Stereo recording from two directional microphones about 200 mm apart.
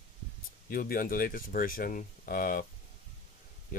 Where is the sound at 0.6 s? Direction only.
45° left (ahead or behind).